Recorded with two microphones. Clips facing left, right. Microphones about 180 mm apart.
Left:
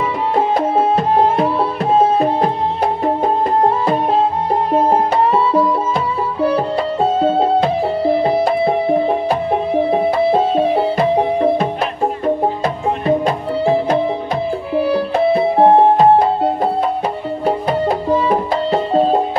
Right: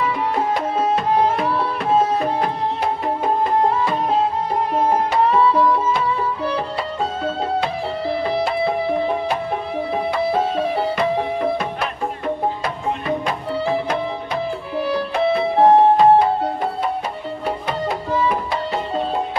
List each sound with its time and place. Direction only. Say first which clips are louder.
1.1 s music: left 5 dB; 35° left (ahead or behind)
1.9 s tabla: left 4 dB; 30° left (ahead or behind)
4.7 s music: left 4 dB; 30° left (ahead or behind)
6.5 s music: left 7 dB; 30° left (ahead or behind)
8.2 s music: left 5 dB; 45° left (ahead or behind); by 10.6 s 30° left (ahead or behind)
12.6 s music: left 6 dB; 35° left (ahead or behind)
17.5 s music: left 7 dB; 40° left (ahead or behind)